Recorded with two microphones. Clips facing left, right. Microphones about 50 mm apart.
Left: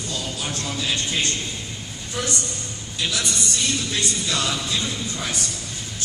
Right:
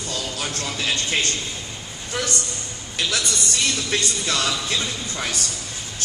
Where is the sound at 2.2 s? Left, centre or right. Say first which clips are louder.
Even; right.